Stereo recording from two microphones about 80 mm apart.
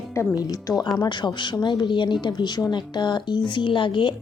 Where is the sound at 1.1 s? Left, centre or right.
Left.